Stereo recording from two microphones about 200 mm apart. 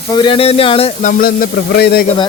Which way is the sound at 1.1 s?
45° left (ahead or behind).